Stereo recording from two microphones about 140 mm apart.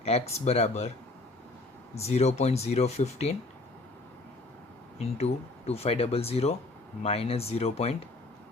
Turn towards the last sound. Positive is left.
turn(degrees=45)  # may be behind; listen again after turning